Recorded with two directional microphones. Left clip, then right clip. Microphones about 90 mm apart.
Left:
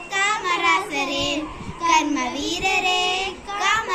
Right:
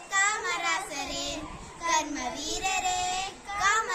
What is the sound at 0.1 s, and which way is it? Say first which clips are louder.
Child singing: left 6 dB; 50° right (ahead or behind).